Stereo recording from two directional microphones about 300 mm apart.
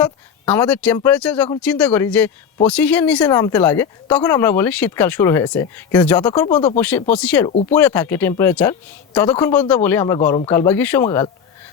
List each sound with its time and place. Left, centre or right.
0.0 s a woman's voice: centre
7.5 s speech: left
7.8 s a woman's voice: centre